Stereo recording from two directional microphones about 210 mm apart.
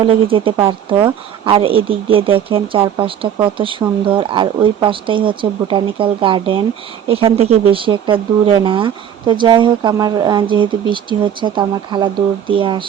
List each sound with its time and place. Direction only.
0.0 s a woman's voice: 25° right (ahead or behind)